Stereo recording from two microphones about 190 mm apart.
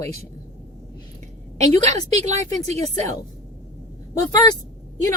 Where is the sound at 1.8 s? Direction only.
35° right (ahead or behind).